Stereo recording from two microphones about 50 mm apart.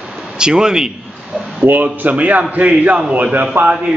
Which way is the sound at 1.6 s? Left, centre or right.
Right.